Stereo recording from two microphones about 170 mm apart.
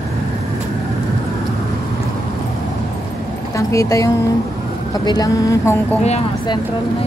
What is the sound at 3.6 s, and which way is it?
Speech, 20° left (ahead or behind).